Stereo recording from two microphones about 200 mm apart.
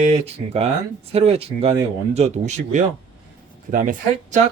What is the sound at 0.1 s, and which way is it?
Speech, 30° right (ahead or behind).